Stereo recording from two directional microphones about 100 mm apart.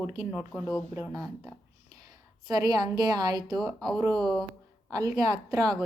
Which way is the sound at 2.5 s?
40° right (ahead or behind).